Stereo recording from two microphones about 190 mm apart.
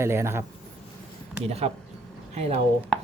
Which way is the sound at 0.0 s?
15° right (ahead or behind).